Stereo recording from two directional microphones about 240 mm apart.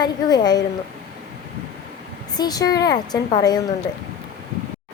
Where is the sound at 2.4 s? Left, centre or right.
Centre.